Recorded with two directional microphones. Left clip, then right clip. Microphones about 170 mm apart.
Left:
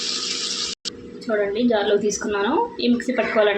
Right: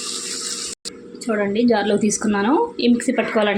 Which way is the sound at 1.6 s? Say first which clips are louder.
Right 1 dB; 50° right (ahead or behind).